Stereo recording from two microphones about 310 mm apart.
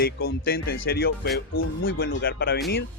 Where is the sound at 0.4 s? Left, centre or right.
Left.